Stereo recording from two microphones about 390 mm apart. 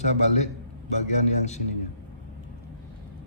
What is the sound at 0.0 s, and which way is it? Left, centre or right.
A man's voice, centre.